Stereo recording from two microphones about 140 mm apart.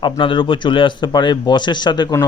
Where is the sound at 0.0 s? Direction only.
35° left (ahead or behind).